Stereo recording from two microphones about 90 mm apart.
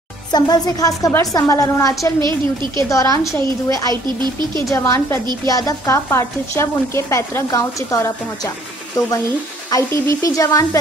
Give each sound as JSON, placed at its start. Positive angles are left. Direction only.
{"t": 0.3, "sound": "a woman's voice", "side_deg": 45}
{"t": 2.1, "sound": "a woman's voice", "side_deg": -55}
{"t": 2.9, "sound": "speech", "side_deg": 35}
{"t": 3.9, "sound": "speech", "side_deg": -55}
{"t": 4.6, "sound": "speech", "side_deg": 35}
{"t": 5.2, "sound": "speech", "side_deg": -55}
{"t": 5.5, "sound": "speech", "side_deg": 40}
{"t": 9.7, "sound": "speech", "side_deg": 35}